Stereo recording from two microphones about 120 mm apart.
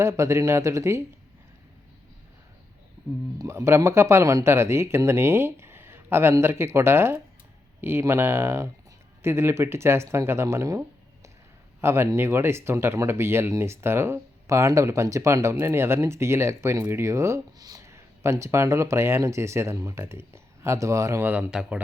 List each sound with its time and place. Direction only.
0.0 s speech: 25° right (ahead or behind)
3.3 s speech: 25° right (ahead or behind)
21.2 s speech: 10° right (ahead or behind)